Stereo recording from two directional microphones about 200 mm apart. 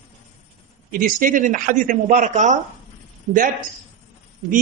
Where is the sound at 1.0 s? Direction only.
40° right (ahead or behind).